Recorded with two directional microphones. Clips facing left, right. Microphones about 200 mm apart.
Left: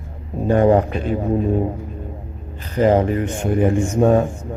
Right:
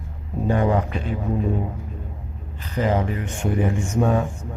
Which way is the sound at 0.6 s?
45° left (ahead or behind).